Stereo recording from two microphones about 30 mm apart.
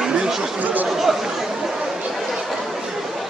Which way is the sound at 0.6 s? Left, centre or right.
Right.